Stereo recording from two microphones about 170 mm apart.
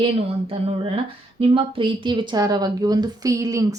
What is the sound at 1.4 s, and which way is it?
A woman's voice, 30° right (ahead or behind).